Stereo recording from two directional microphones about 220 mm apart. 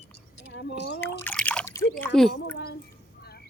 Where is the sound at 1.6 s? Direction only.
15° left (ahead or behind).